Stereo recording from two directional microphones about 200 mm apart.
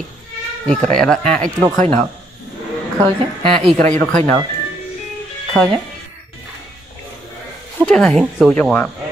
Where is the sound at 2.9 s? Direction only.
25° right (ahead or behind).